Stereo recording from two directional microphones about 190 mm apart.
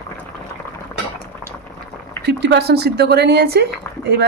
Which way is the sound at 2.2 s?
65° right (ahead or behind).